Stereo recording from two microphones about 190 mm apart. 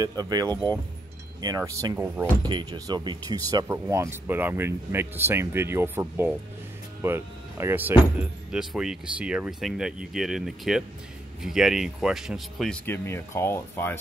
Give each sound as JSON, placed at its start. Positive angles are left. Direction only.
{"t": 0.0, "sound": "wind chime", "side_deg": -20}
{"t": 0.5, "sound": "speech", "side_deg": 10}
{"t": 1.4, "sound": "wind chime", "side_deg": -20}
{"t": 2.4, "sound": "speech", "side_deg": -25}